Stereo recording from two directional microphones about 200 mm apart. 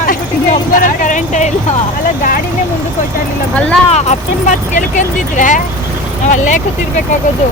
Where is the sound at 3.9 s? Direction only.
35° left (ahead or behind).